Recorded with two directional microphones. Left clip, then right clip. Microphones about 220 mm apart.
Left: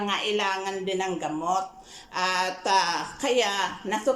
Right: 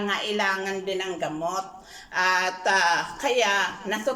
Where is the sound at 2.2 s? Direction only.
15° left (ahead or behind).